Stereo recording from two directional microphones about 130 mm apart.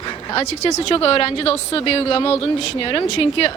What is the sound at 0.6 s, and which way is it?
A woman's voice, 35° left (ahead or behind).